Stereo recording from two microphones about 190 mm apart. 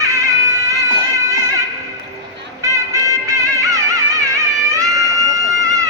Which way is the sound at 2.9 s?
15° right (ahead or behind).